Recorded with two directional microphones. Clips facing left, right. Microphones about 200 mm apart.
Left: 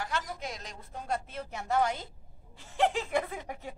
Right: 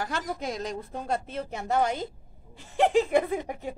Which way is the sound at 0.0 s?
40° right (ahead or behind).